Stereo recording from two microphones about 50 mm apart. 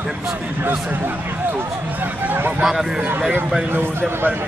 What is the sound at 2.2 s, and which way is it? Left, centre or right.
Speech, right.